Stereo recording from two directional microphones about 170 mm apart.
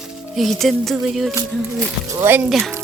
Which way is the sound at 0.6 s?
Centre (ahead or behind).